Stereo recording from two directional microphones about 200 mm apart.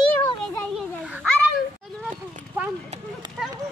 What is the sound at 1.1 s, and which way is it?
Children playing, 5° right (ahead or behind).